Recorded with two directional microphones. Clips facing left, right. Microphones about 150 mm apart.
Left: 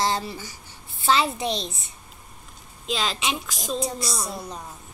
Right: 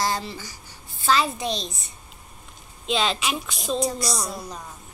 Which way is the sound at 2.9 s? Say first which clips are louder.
Right 3 dB; centre (ahead or behind).